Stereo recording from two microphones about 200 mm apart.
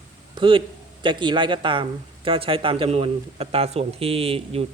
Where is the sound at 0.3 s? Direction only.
25° right (ahead or behind).